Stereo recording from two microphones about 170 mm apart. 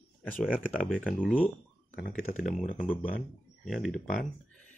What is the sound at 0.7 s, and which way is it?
Speech, 5° left (ahead or behind).